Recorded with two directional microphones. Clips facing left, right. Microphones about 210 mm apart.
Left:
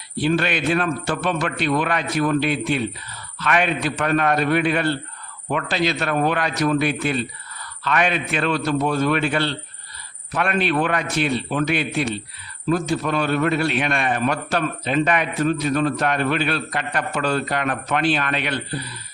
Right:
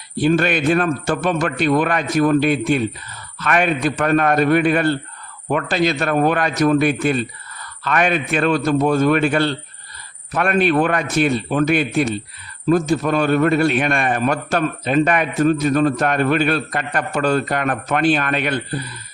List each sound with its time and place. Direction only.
0.2 s a man's voice: 45° right (ahead or behind)